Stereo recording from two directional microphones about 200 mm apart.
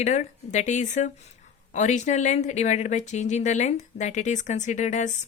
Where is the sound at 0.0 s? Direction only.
35° left (ahead or behind).